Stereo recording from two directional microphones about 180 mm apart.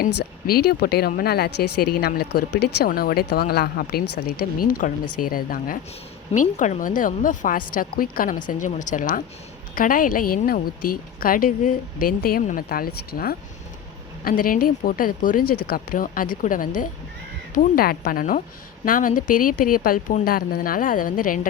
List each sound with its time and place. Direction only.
0.0 s speech: 55° left (ahead or behind)